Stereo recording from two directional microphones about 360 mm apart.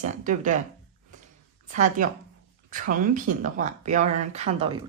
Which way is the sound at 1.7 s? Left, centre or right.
Right.